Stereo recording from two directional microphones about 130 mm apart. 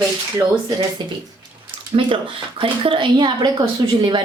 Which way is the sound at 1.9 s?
45° right (ahead or behind).